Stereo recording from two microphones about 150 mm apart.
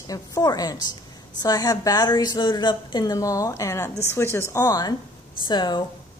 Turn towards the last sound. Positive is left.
turn(degrees=30)  # may be behind; listen again after turning